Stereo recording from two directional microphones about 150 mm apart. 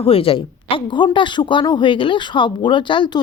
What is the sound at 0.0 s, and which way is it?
A woman's voice, 40° left (ahead or behind).